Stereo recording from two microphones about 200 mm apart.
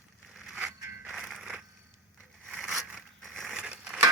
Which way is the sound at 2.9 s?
Centre (ahead or behind).